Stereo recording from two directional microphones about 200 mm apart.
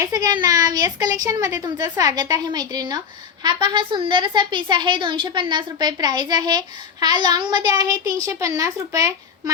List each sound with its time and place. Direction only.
0.0 s a woman's voice: 15° right (ahead or behind)